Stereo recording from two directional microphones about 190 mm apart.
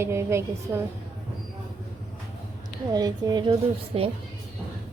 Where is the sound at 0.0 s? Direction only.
15° right (ahead or behind).